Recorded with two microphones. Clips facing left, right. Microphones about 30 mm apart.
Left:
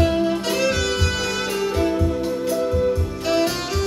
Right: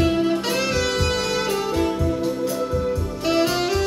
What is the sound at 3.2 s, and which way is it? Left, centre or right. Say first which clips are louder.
Saxophone: right 1 dB; centre.